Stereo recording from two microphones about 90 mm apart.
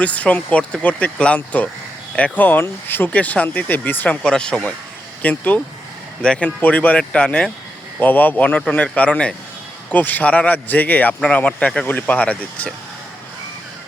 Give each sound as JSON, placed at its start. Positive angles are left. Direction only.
{"t": 0.0, "sound": "speech", "side_deg": 15}
{"t": 4.2, "sound": "speech", "side_deg": 10}